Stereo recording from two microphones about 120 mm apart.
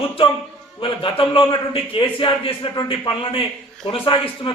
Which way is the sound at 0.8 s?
45° left (ahead or behind).